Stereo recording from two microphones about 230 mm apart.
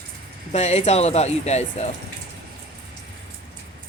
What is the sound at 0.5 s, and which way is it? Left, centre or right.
Speech, left.